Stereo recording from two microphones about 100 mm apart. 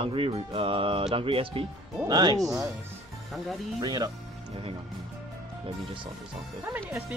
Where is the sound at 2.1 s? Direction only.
45° right (ahead or behind).